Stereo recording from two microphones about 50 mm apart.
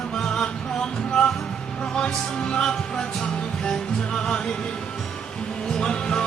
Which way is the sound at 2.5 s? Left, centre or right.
Centre.